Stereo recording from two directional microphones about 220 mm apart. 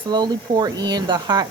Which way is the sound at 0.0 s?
20° right (ahead or behind).